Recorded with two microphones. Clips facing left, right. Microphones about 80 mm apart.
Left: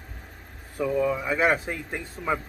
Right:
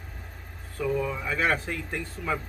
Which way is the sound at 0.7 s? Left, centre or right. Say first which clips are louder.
Left 4 dB; centre.